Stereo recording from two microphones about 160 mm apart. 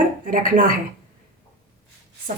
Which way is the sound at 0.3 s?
55° right (ahead or behind).